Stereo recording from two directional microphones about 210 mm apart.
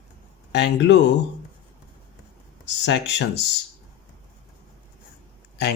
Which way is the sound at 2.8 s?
55° left (ahead or behind).